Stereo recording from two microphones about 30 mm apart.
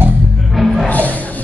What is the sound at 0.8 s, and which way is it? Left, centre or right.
Music, left.